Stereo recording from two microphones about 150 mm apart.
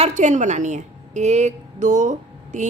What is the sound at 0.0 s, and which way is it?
A woman's voice, 50° right (ahead or behind).